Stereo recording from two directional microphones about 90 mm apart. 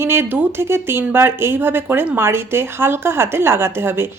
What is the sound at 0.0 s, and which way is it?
A woman's voice, 30° right (ahead or behind).